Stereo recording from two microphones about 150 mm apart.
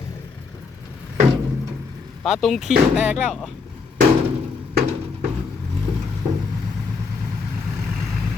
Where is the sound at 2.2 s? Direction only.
Centre (ahead or behind).